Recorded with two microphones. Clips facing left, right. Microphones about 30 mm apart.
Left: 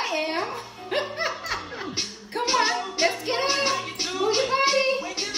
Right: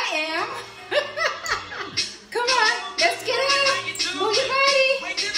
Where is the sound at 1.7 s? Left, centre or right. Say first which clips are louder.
Right 2 dB; right.